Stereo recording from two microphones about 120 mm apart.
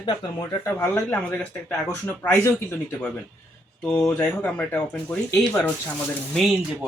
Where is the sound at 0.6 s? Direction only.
15° left (ahead or behind).